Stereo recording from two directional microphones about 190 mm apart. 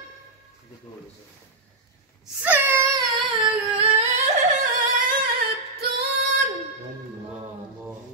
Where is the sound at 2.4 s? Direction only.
15° right (ahead or behind); by 4.3 s 30° right (ahead or behind).